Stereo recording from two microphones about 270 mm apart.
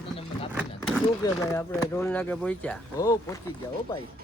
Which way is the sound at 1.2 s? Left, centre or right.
Centre.